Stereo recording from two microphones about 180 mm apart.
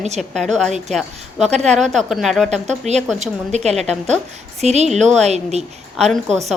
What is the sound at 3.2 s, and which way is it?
A woman's voice, 40° right (ahead or behind).